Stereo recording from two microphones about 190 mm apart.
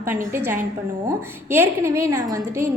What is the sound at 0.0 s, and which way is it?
A woman's voice, 15° right (ahead or behind).